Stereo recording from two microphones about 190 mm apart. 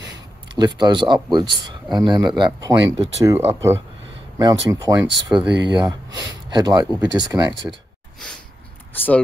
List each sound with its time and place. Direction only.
0.6 s speech: 20° right (ahead or behind)
7.3 s speech: 10° right (ahead or behind)
8.9 s speech: 10° left (ahead or behind)